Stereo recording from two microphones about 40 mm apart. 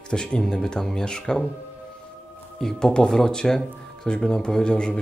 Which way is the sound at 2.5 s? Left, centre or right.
Centre.